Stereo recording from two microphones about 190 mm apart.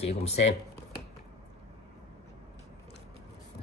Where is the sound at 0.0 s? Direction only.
35° left (ahead or behind).